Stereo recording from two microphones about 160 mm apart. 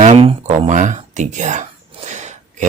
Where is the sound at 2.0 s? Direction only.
50° right (ahead or behind).